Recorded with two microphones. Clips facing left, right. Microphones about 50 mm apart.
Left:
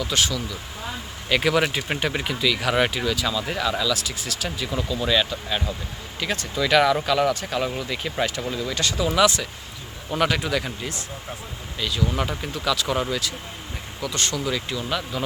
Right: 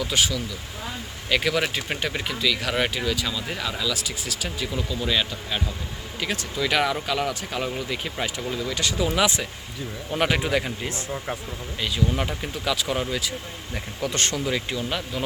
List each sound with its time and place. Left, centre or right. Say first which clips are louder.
0.0 s speech: even; centre
1.3 s speech: left 2 dB; centre
14.0 s speech: right 1 dB; right
14.4 s speech: even; right